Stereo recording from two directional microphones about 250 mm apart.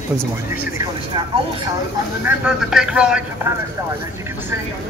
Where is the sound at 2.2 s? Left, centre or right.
Centre.